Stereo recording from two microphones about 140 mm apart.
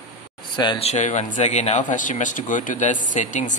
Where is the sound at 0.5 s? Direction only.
35° left (ahead or behind).